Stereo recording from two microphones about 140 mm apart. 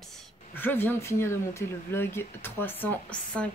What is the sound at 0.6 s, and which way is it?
A woman's voice, 15° left (ahead or behind).